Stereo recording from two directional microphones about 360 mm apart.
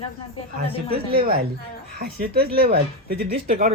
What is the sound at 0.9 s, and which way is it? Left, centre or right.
Speech, right.